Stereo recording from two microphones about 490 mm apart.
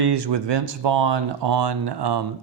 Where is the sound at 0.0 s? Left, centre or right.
Right.